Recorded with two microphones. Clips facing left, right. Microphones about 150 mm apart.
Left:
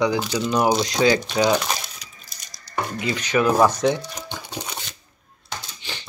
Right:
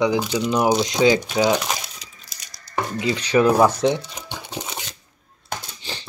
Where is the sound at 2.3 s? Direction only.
90° right.